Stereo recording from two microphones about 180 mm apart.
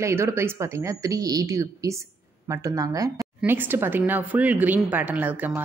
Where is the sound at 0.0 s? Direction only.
15° right (ahead or behind).